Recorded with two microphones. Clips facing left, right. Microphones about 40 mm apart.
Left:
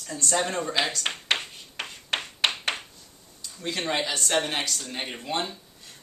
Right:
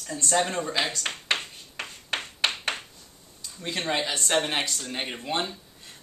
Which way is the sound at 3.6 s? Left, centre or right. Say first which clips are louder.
Even; right.